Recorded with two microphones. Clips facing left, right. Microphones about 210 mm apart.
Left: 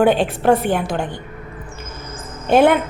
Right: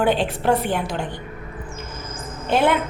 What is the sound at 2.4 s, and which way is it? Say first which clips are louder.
Speech: left 6 dB; 50° left (ahead or behind).